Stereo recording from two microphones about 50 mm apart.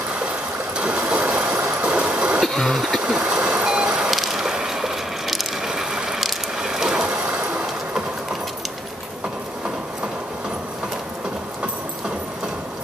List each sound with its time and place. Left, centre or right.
0.7 s stream: right
1.6 s train: right
2.4 s a sound: centre
2.9 s vehicle: centre
4.1 s a sound: centre
5.7 s ratchet: centre
7.3 s vehicle: centre